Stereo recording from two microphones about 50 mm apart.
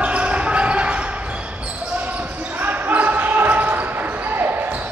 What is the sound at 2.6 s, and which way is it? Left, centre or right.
Basketball bounce, right.